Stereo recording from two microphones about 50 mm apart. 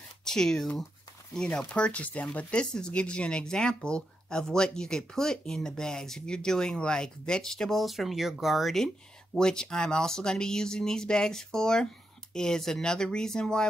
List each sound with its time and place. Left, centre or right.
0.2 s speech: centre
1.7 s speech: left; by 7.8 s centre
7.8 s speech: centre
9.4 s speech: centre